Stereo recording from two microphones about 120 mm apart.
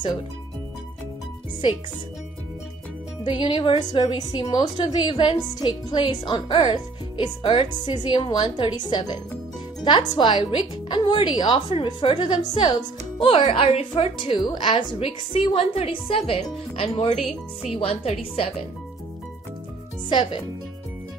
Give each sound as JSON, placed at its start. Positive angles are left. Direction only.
{"t": 3.3, "sound": "a woman's voice", "side_deg": 40}
{"t": 13.5, "sound": "a woman's voice", "side_deg": 65}
{"t": 14.1, "sound": "a woman's voice", "side_deg": 40}
{"t": 17.2, "sound": "speech", "side_deg": 0}
{"t": 17.7, "sound": "a woman's voice", "side_deg": 55}
{"t": 20.1, "sound": "speech", "side_deg": 40}